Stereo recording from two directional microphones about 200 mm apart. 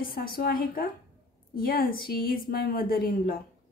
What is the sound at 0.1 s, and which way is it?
Speech, 50° left (ahead or behind).